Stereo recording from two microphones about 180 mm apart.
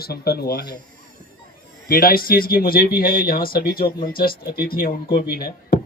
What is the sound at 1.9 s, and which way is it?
Speech, 55° left (ahead or behind).